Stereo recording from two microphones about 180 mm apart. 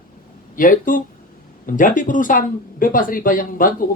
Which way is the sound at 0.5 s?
50° left (ahead or behind).